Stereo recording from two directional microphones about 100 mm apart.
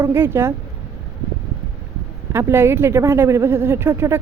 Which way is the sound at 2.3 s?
25° right (ahead or behind).